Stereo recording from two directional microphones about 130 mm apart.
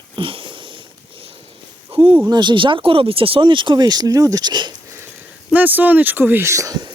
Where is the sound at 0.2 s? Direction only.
40° right (ahead or behind).